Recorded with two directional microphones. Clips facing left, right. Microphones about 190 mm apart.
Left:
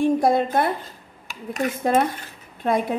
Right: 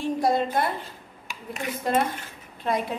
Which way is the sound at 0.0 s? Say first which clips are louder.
Left 5 dB; 55° left (ahead or behind).